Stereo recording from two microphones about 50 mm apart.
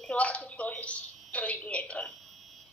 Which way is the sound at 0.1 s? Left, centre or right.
Left.